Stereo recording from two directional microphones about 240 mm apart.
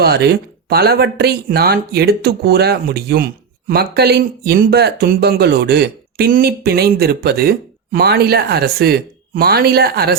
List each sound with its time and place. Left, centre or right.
0.0 s speech: right